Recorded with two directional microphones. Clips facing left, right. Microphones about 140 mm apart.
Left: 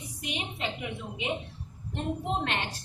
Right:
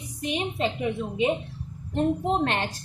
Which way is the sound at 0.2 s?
35° right (ahead or behind).